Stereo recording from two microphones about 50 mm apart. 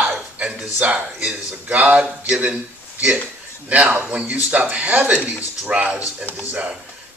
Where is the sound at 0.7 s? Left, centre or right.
Right.